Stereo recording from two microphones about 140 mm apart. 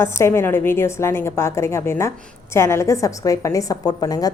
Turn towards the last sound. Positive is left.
turn(degrees=25)  # may be behind; listen again after turning